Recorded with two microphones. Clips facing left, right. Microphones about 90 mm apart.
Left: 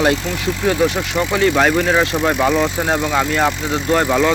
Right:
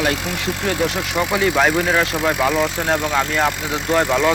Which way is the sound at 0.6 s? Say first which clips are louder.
Left 5 dB; centre (ahead or behind).